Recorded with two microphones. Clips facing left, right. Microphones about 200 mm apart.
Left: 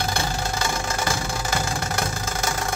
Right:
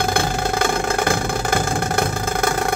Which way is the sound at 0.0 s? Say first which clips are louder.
Right 6 dB; 55° right (ahead or behind).